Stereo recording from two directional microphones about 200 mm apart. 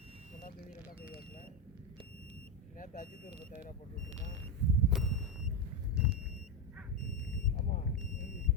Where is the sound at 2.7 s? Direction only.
40° left (ahead or behind).